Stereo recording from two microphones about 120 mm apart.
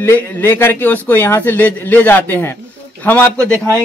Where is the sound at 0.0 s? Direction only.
20° left (ahead or behind).